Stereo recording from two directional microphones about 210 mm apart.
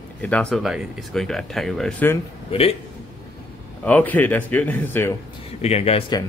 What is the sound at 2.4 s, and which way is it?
Speech, 25° left (ahead or behind).